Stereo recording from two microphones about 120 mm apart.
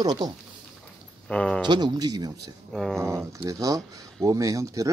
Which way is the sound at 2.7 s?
Centre (ahead or behind).